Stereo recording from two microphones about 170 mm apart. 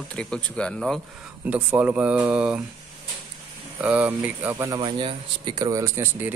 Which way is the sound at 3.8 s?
10° right (ahead or behind).